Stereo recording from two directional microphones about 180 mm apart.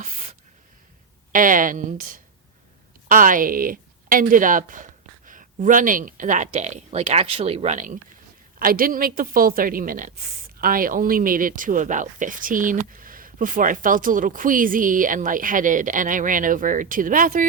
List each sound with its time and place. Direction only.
1.3 s a woman's voice: 50° right (ahead or behind)